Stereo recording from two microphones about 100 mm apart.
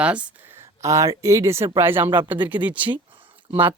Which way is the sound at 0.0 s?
15° right (ahead or behind).